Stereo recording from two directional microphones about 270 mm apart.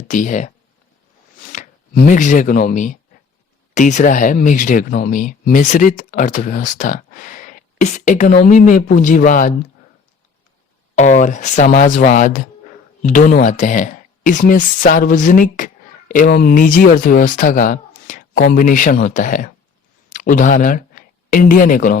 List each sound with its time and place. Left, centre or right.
0.1 s speech: left
10.9 s speech: left